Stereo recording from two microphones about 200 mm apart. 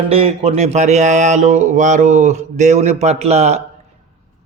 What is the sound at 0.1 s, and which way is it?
A man's voice, 30° right (ahead or behind).